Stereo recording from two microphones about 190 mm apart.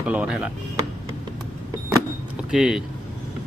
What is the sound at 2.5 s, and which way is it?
Speech, 5° right (ahead or behind).